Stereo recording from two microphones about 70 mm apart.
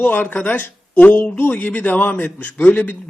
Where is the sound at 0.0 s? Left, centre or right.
Left.